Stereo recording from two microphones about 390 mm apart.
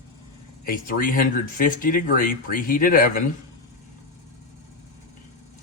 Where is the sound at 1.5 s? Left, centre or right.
Left.